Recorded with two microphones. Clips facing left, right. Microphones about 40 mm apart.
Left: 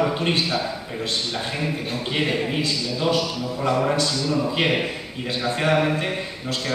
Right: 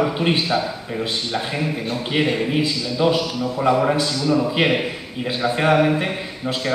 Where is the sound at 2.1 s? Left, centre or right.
Centre.